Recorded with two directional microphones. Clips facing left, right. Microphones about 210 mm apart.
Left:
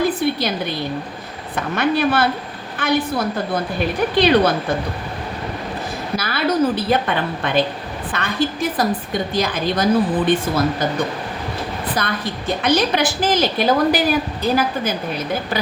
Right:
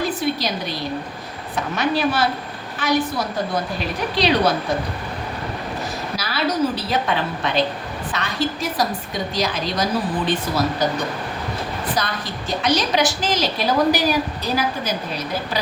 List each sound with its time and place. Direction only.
0.0 s a sound: 55° left (ahead or behind)
1.5 s a woman's voice: 55° left (ahead or behind)
6.1 s a woman's voice: 55° left (ahead or behind)
11.9 s a woman's voice: 55° left (ahead or behind)